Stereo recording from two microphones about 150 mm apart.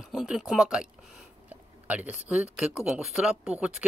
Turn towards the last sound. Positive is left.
turn(degrees=-10)  # may be behind; listen again after turning